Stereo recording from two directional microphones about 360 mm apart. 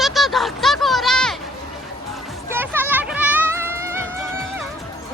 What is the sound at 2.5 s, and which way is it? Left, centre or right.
Music, centre.